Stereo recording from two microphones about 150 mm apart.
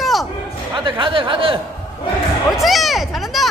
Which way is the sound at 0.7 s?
35° right (ahead or behind).